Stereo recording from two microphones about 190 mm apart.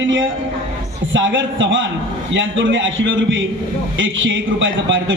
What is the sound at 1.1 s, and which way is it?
A man's voice, 80° right.